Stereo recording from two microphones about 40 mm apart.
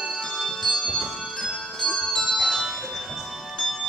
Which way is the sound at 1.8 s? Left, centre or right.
Centre.